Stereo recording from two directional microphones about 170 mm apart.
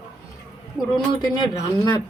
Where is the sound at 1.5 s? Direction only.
20° left (ahead or behind).